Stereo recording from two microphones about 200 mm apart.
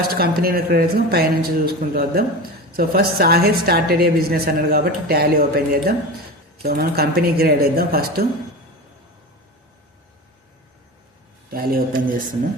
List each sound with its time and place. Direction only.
0.0 s a woman's voice: 50° right (ahead or behind)
11.5 s a woman's voice: 50° right (ahead or behind)